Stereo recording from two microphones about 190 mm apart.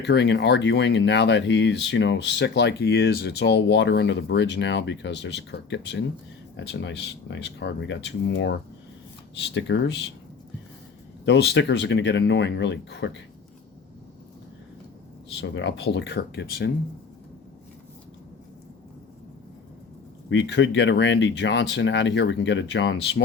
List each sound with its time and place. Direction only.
0.0 s speech: 65° left (ahead or behind)
9.6 s speech: 70° left (ahead or behind)
11.3 s speech: 70° left (ahead or behind)
15.4 s speech: 70° left (ahead or behind)
20.3 s speech: 70° left (ahead or behind)